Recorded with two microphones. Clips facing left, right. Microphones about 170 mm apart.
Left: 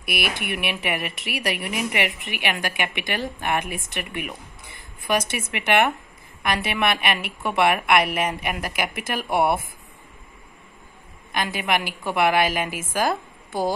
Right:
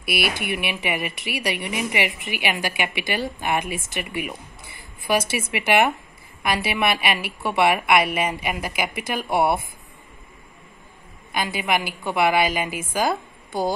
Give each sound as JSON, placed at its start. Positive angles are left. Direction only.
{"t": 0.0, "sound": "speech", "side_deg": 0}
{"t": 11.3, "sound": "speech", "side_deg": 0}